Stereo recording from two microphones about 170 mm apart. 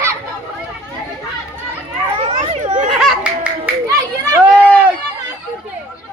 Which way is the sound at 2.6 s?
45° right (ahead or behind).